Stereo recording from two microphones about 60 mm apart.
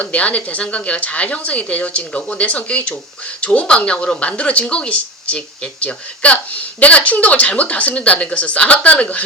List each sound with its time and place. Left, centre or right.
0.0 s speech: left